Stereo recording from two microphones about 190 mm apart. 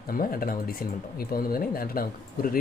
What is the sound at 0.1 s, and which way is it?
Speech, 50° left (ahead or behind).